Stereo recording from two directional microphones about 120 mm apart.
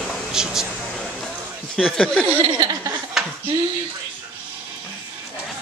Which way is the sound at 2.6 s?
35° right (ahead or behind).